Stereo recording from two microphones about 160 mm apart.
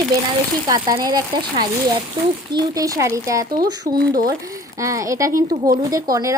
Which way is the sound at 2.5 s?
25° right (ahead or behind).